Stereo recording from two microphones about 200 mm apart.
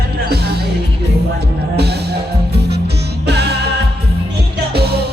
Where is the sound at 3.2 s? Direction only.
55° right (ahead or behind).